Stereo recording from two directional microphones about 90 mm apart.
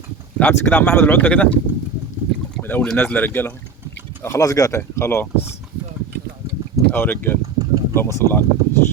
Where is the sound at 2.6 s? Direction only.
20° left (ahead or behind).